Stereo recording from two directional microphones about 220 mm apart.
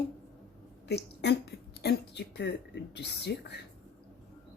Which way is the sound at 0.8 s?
50° left (ahead or behind).